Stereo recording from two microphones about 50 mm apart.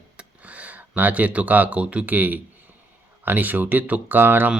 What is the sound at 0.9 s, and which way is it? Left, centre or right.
Speech, right.